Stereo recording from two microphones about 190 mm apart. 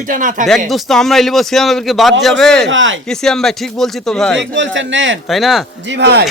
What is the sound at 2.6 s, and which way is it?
Speech, 80° right.